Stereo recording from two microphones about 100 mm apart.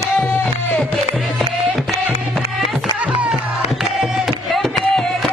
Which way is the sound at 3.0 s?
15° right (ahead or behind).